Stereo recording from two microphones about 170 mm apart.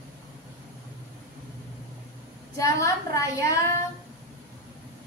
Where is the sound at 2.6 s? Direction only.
20° left (ahead or behind).